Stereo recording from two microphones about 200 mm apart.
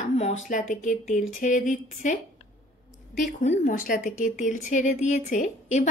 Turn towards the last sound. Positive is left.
turn(degrees=40)  # may be behind; listen again after turning